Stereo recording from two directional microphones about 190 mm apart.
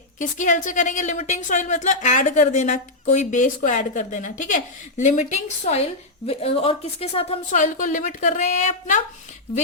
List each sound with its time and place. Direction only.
0.2 s a woman's voice: 40° left (ahead or behind)